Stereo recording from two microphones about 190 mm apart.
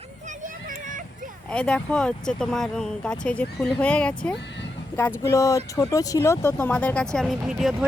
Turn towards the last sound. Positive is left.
turn(degrees=0)  # may be behind; listen again after turning